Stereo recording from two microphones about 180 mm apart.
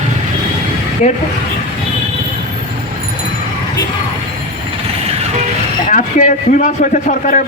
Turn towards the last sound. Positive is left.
turn(degrees=45)  # may be behind; listen again after turning